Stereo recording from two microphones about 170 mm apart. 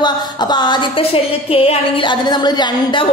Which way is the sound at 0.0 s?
25° left (ahead or behind).